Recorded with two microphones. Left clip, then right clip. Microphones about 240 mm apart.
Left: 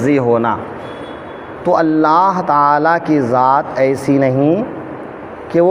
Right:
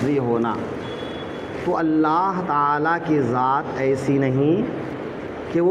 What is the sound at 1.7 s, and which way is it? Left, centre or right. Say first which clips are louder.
Speech: left 8 dB; left.